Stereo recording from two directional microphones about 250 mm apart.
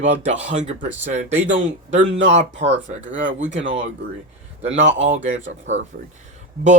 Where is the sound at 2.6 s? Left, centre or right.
Right.